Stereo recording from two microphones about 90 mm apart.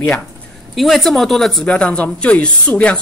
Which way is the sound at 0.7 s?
Centre (ahead or behind).